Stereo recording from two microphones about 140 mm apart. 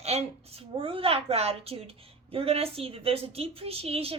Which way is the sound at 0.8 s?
40° right (ahead or behind).